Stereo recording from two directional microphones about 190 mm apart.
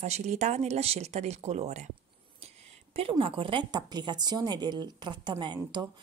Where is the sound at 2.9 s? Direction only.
30° right (ahead or behind).